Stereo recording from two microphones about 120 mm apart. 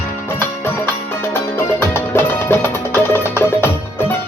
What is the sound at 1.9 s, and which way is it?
Music, 20° left (ahead or behind).